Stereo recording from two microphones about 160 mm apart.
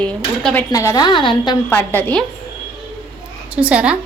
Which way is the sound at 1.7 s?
10° left (ahead or behind).